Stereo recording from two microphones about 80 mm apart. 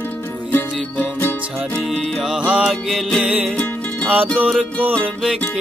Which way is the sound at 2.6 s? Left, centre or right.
Centre.